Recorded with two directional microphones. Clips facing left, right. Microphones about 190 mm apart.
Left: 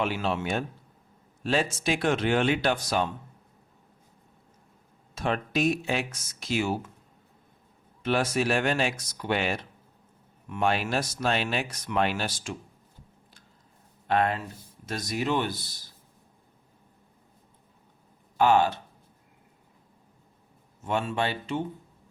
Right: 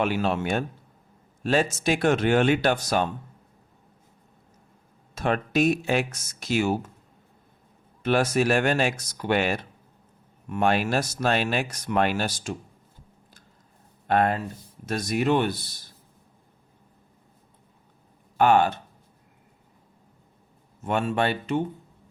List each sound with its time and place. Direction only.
0.0 s speech: 55° right (ahead or behind)
5.1 s speech: 50° right (ahead or behind)
8.0 s speech: 50° right (ahead or behind)
14.1 s speech: 45° right (ahead or behind)
18.3 s speech: 55° right (ahead or behind)
20.8 s speech: 55° right (ahead or behind)